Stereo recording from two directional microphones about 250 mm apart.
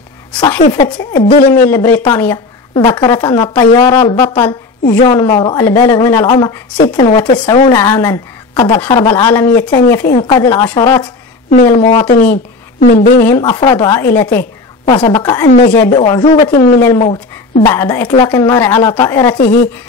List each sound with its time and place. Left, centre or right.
0.7 s a man's voice: centre
1.7 s speech: centre
11.7 s a man's voice: left
13.3 s speech: centre
16.0 s a man's voice: centre
17.6 s speech: centre
19.3 s a woman's voice: left